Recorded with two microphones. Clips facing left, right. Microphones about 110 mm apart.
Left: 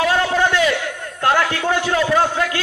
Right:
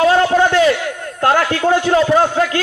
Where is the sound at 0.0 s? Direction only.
30° right (ahead or behind).